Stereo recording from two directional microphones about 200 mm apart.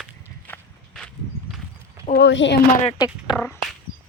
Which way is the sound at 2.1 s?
60° left (ahead or behind).